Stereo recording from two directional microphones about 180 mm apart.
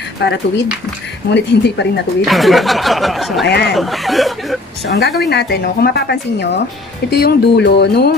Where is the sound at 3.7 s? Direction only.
Centre (ahead or behind).